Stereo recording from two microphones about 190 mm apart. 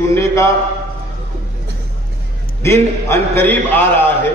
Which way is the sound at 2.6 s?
15° left (ahead or behind).